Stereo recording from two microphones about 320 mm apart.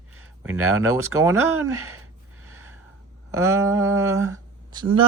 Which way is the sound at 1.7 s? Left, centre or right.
Right.